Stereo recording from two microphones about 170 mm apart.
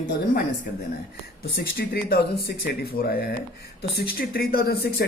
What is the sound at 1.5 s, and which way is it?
Speech, 65° left (ahead or behind).